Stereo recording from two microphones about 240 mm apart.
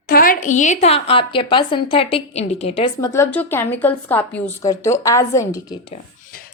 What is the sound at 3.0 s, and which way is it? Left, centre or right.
A woman's voice, centre.